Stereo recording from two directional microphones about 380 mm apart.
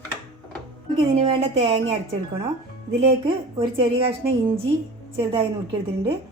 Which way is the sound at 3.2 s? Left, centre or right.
Centre.